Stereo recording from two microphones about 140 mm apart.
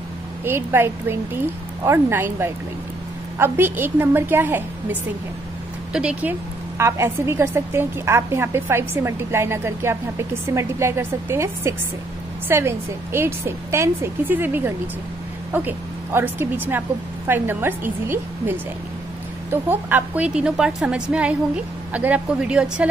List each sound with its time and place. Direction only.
0.5 s a woman's voice: 15° right (ahead or behind)
6.8 s a woman's voice: 20° right (ahead or behind)